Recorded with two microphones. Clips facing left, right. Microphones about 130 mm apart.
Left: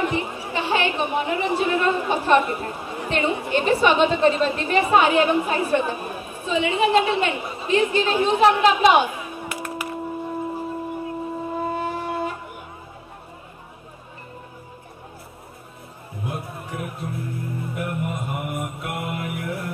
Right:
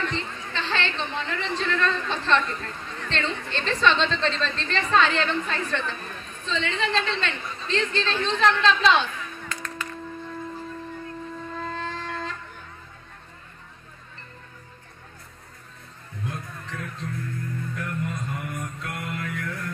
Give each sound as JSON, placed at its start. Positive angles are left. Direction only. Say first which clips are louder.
{"t": 0.0, "sound": "a woman's voice", "louder": "left 6 dB", "side_deg": 15}
{"t": 10.4, "sound": "shofar", "louder": "left 7 dB", "side_deg": 10}
{"t": 16.6, "sound": "music", "louder": "left 4 dB", "side_deg": 15}
{"t": 17.6, "sound": "music", "louder": "left 5 dB", "side_deg": 15}